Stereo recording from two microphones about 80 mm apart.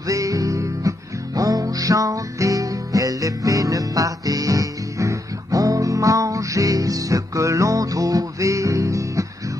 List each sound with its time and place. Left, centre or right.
0.1 s music: right